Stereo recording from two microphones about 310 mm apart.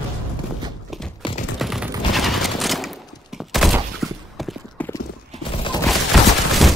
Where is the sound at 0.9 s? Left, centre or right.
Centre.